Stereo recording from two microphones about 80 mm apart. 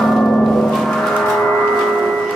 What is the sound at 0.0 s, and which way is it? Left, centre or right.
Music, centre.